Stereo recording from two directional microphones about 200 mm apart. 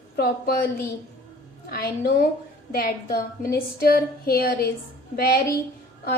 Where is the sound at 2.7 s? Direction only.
50° left (ahead or behind).